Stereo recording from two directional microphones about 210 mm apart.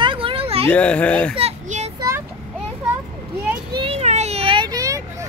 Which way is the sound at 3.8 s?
30° right (ahead or behind).